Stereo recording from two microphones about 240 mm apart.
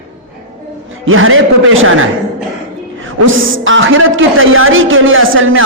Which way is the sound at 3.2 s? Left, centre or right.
Right.